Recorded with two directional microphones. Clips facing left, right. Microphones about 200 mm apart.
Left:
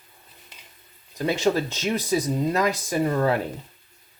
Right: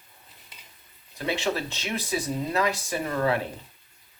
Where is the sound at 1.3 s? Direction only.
45° left (ahead or behind).